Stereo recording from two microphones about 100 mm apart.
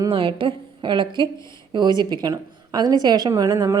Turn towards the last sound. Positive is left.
turn(degrees=-35)  # may be behind; listen again after turning